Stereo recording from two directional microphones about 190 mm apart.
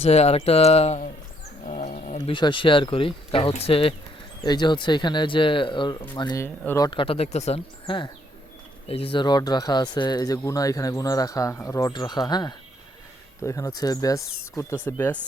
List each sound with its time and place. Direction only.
0.0 s speech: 35° left (ahead or behind); by 15.2 s 10° left (ahead or behind)